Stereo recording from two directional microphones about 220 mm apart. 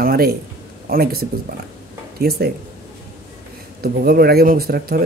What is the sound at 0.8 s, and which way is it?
Speech, 45° right (ahead or behind).